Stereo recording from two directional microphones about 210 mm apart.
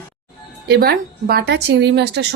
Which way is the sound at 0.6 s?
50° right (ahead or behind).